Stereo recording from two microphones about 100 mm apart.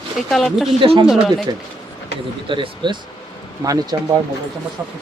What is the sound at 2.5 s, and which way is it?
Speech, 55° right (ahead or behind).